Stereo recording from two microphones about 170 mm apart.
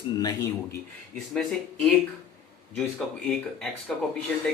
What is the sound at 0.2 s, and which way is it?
Speech, 20° left (ahead or behind).